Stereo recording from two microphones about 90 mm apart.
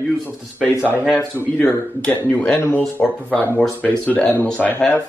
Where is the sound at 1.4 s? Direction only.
25° left (ahead or behind).